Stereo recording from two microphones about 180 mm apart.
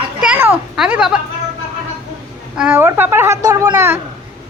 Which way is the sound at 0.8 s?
5° right (ahead or behind).